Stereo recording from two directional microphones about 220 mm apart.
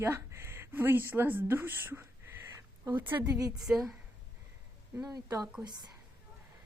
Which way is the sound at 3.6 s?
Centre (ahead or behind).